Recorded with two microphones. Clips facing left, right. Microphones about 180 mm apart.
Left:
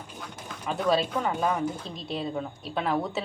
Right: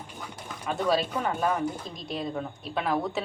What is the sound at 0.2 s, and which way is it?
A woman's voice, centre (ahead or behind).